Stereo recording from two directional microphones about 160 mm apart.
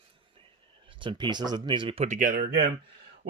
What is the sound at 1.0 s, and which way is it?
Speech, 30° right (ahead or behind).